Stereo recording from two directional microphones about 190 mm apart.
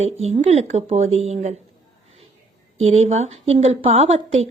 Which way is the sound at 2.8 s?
35° right (ahead or behind).